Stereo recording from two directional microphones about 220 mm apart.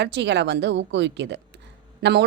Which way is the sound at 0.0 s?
50° right (ahead or behind).